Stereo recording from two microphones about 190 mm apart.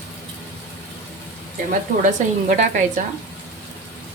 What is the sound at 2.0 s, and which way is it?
Speech, 40° right (ahead or behind).